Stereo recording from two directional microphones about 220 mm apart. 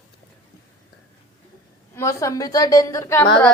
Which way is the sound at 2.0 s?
15° left (ahead or behind).